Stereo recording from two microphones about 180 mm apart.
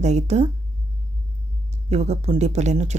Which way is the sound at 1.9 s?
35° right (ahead or behind).